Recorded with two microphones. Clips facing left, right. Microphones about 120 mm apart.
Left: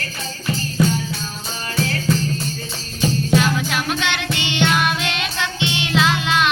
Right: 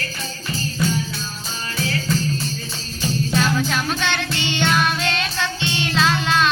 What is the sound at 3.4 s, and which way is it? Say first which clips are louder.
Music: even; 15° left (ahead or behind).